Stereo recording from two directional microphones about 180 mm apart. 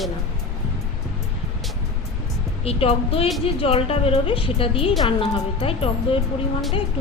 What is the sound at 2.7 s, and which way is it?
A woman's voice, 30° left (ahead or behind).